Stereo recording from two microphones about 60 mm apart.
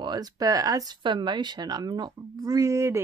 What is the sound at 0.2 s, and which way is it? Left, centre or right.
A woman's voice, right.